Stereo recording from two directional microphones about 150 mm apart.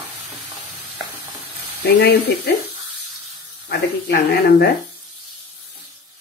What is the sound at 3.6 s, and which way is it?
Speech, 90° left.